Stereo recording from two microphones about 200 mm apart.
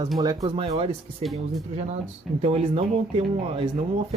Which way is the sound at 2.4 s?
25° right (ahead or behind).